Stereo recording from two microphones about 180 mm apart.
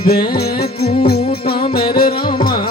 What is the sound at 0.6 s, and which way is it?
Music, 60° left (ahead or behind).